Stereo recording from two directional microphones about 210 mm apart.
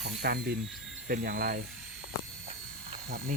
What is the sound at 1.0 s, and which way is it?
Speech, 40° right (ahead or behind).